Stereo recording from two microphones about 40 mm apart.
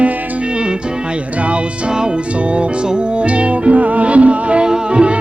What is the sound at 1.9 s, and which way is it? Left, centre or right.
Music, right.